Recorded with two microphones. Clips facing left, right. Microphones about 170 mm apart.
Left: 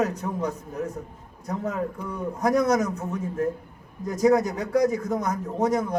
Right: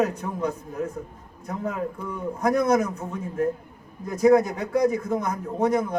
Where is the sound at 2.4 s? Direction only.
40° left (ahead or behind).